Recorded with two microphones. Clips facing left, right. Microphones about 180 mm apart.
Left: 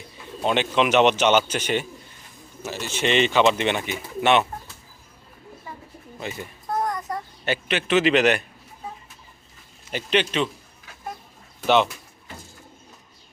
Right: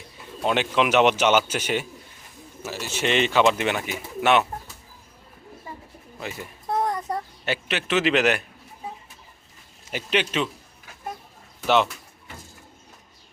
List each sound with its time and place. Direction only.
0.4 s a man's voice: 5° right (ahead or behind)
6.1 s speech: centre (ahead or behind)
6.7 s a sound: 25° right (ahead or behind)
7.1 s speech: centre (ahead or behind)
9.9 s a man's voice: 5° right (ahead or behind)
11.6 s speech: centre (ahead or behind)